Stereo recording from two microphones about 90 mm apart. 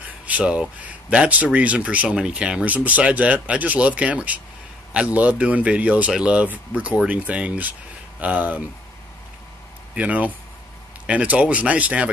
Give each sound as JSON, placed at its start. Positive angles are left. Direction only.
{"t": 0.3, "sound": "speech", "side_deg": -15}
{"t": 9.9, "sound": "speech", "side_deg": -15}